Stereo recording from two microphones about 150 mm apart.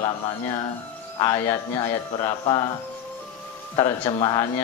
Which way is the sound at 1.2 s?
20° left (ahead or behind).